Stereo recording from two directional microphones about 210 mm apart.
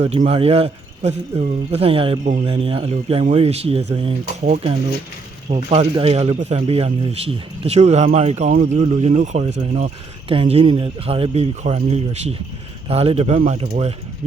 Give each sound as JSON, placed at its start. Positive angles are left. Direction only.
{"t": 0.0, "sound": "speech", "side_deg": -30}
{"t": 5.5, "sound": "speech", "side_deg": -30}